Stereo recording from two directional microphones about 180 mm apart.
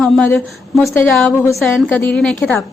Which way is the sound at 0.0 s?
10° left (ahead or behind).